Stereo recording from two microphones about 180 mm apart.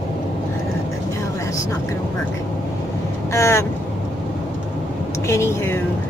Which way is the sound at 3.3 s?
15° left (ahead or behind).